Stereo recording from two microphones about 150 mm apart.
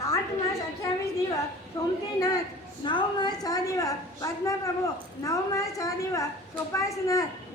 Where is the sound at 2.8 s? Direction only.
30° left (ahead or behind).